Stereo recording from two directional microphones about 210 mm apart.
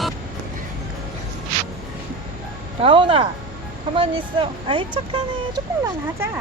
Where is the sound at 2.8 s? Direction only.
25° right (ahead or behind).